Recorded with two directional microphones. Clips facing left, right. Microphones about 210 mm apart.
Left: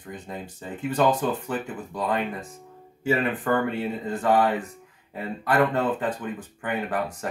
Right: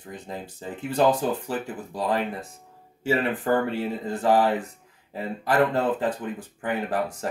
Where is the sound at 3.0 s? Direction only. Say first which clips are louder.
Even; 30° right (ahead or behind).